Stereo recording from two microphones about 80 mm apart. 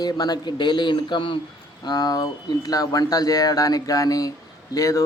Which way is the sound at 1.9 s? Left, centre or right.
Left.